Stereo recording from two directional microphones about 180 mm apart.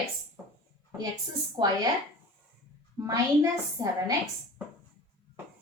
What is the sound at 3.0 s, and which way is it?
A woman's voice, 20° right (ahead or behind).